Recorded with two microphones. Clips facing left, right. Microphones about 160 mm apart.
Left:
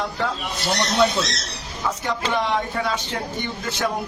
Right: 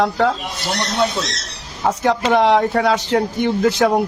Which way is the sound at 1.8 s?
75° right (ahead or behind).